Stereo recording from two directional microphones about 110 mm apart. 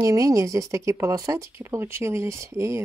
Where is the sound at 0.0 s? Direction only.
30° right (ahead or behind).